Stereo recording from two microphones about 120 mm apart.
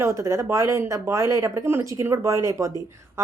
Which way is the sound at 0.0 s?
25° right (ahead or behind).